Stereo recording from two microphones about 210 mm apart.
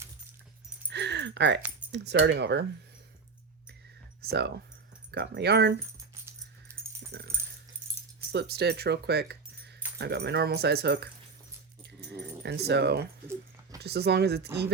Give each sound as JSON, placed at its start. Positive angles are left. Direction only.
{"t": 0.9, "sound": "a sound", "side_deg": -55}
{"t": 1.9, "sound": "speech", "side_deg": -55}
{"t": 4.2, "sound": "speech", "side_deg": -50}
{"t": 6.7, "sound": "dog", "side_deg": -10}
{"t": 7.1, "sound": "dog", "side_deg": -50}
{"t": 8.3, "sound": "speech", "side_deg": -50}
{"t": 12.4, "sound": "speech", "side_deg": -50}